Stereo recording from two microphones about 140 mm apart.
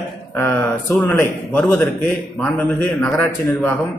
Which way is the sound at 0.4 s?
15° left (ahead or behind).